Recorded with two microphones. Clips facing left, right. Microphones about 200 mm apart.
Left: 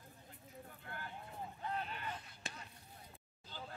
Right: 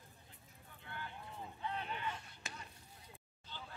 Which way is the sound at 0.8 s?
45° left (ahead or behind).